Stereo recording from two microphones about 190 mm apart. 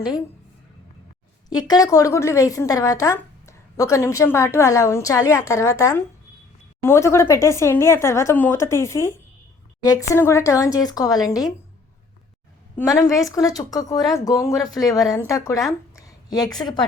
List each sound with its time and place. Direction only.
1.5 s a woman's voice: 20° left (ahead or behind)
12.7 s a woman's voice: 15° left (ahead or behind)
16.0 s a sound: 20° left (ahead or behind)